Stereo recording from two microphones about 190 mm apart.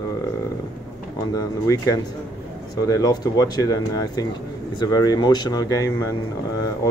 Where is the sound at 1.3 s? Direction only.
20° left (ahead or behind).